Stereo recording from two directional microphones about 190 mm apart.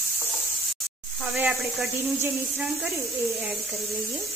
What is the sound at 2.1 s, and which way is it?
Speech, 15° right (ahead or behind).